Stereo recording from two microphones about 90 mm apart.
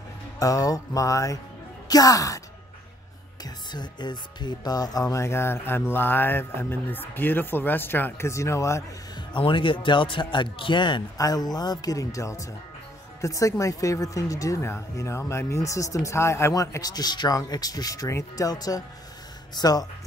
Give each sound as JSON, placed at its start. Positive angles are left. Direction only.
{"t": 0.4, "sound": "speech", "side_deg": 40}
{"t": 3.4, "sound": "speech", "side_deg": 55}
{"t": 9.3, "sound": "a man's voice", "side_deg": 65}
{"t": 11.1, "sound": "speech", "side_deg": 45}
{"t": 16.8, "sound": "speech", "side_deg": 50}